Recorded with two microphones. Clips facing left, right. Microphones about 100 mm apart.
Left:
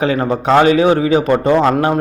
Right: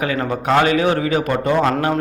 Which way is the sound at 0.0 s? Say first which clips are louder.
Left 5 dB; 25° left (ahead or behind).